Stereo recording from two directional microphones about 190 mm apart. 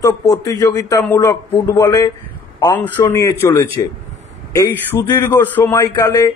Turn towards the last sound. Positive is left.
turn(degrees=15)  # may be behind; listen again after turning